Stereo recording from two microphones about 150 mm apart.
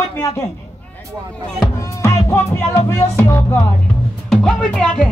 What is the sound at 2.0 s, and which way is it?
Music, 20° left (ahead or behind).